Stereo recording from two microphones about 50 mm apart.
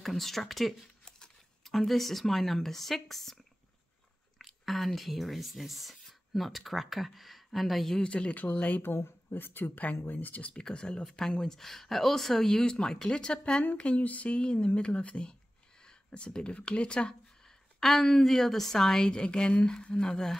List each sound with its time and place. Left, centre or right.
0.0 s speech: centre
8.0 s a sound: left
8.3 s speech: left
8.8 s speech: left
10.6 s speech: centre
13.4 s a sound: left
15.8 s speech: centre
17.7 s speech: centre